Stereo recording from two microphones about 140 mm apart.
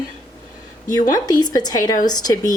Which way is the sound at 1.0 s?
30° left (ahead or behind).